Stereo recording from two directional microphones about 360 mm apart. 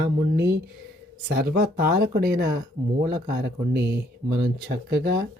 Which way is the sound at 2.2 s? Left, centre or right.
Right.